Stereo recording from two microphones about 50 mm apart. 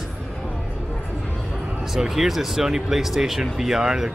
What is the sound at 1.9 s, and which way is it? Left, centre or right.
Speech, centre.